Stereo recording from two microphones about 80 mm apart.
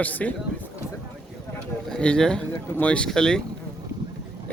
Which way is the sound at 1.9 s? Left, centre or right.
Centre.